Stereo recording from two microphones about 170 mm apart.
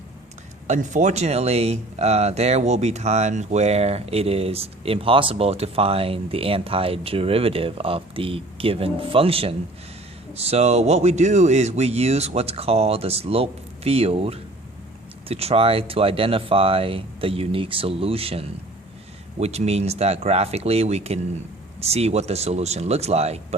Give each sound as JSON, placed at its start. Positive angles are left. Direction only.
{"t": 0.7, "sound": "speech", "side_deg": -45}